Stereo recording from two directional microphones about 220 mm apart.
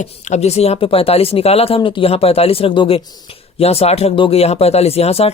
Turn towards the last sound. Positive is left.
turn(degrees=25)  # may be behind; listen again after turning